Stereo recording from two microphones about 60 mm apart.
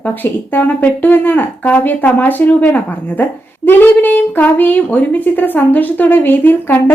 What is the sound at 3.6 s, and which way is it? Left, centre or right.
A woman's voice, left.